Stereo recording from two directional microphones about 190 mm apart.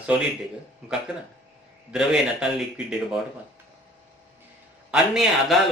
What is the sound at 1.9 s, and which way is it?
Speech, 5° right (ahead or behind).